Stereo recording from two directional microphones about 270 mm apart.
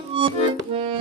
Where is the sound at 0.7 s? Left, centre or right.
Centre.